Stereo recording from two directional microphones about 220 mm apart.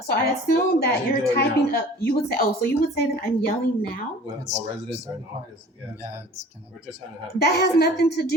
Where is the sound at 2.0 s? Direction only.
45° left (ahead or behind).